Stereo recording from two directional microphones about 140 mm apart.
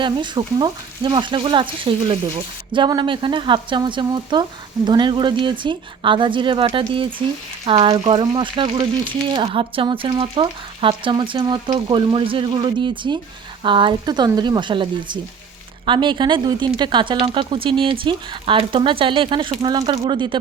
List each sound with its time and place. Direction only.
0.0 s speech: 35° right (ahead or behind)